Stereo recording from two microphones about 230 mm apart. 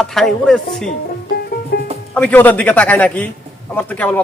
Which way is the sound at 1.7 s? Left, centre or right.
Left.